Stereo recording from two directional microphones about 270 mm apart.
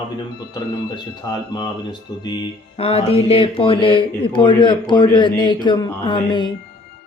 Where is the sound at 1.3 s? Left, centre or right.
Centre.